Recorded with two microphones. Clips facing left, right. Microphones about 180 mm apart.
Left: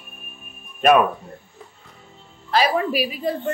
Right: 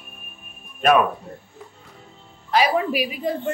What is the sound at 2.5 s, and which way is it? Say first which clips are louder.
Speech: even; 15° right (ahead or behind).